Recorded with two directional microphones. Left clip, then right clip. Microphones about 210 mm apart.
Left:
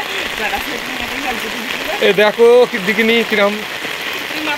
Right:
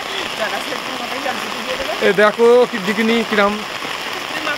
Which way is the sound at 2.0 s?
10° right (ahead or behind).